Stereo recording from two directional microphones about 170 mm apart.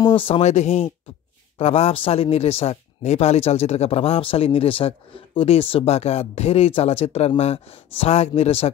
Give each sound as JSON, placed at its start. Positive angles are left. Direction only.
{"t": 0.0, "sound": "speech", "side_deg": 30}